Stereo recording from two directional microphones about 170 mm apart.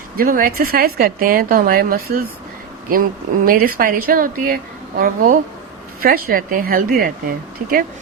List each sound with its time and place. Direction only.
0.2 s a woman's voice: 55° right (ahead or behind)
3.4 s a woman's voice: 60° right (ahead or behind)